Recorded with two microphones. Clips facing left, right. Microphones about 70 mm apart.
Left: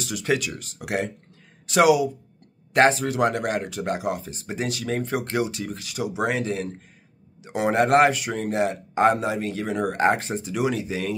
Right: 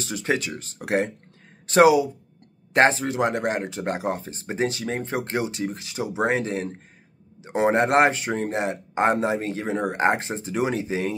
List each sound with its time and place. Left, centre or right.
0.0 s speech: right